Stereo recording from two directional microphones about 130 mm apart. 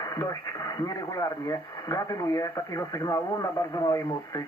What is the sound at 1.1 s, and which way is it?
Speech, 25° left (ahead or behind).